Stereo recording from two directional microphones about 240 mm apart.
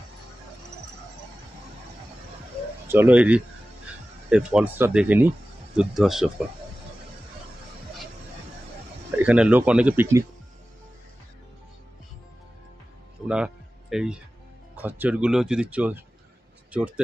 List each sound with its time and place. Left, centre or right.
2.9 s speech: centre
9.2 s speech: centre
13.3 s music: centre
14.8 s speech: centre